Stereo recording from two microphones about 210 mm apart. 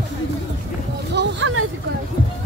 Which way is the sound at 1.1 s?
60° right (ahead or behind).